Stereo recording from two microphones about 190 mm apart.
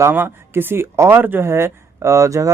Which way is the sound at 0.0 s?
10° right (ahead or behind).